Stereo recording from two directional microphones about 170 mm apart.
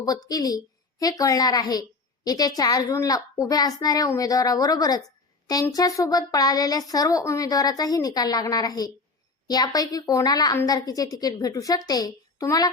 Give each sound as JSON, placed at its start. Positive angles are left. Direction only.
{"t": 0.0, "sound": "speech", "side_deg": 20}